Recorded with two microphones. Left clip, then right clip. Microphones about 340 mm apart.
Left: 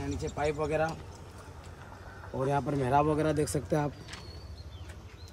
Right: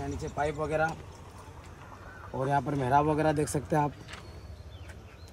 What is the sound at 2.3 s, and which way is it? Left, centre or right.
Speech, centre.